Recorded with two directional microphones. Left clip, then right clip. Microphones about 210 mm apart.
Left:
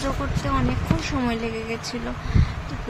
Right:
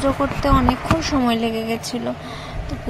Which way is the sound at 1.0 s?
20° right (ahead or behind).